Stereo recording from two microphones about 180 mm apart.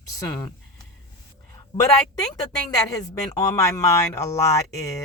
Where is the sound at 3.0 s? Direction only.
20° left (ahead or behind).